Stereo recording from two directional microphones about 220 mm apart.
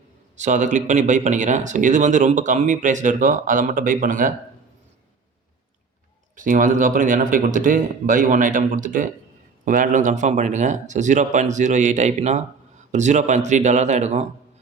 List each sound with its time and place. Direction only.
0.3 s speech: 35° right (ahead or behind)
6.3 s speech: 35° right (ahead or behind)